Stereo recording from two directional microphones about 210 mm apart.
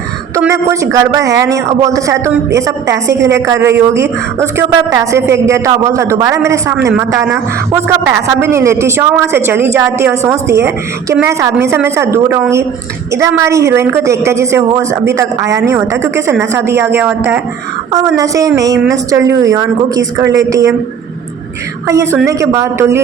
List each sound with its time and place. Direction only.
0.3 s a woman's voice: 15° right (ahead or behind)
21.8 s a woman's voice: 15° right (ahead or behind)